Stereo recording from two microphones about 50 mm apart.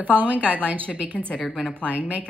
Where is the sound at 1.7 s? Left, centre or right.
Right.